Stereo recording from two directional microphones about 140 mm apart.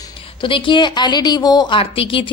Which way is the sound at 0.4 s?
35° left (ahead or behind).